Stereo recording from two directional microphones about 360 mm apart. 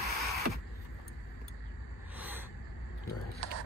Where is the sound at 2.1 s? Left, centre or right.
Centre.